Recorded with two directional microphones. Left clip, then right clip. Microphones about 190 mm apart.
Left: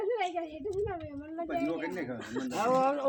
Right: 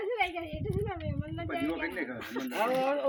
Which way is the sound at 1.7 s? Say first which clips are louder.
Right 1 dB; 35° left (ahead or behind).